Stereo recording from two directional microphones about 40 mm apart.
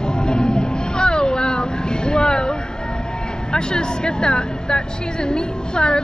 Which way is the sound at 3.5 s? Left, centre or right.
Left.